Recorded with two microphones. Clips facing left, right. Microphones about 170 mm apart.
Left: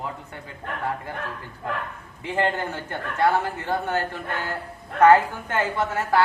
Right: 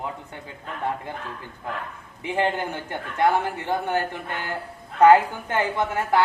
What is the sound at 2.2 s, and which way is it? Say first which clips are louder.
A man's voice: even; 15° right (ahead or behind).